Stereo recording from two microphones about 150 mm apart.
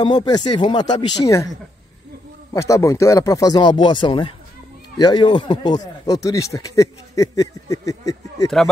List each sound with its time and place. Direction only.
0.0 s speech: 30° left (ahead or behind)
2.5 s speech: 20° left (ahead or behind)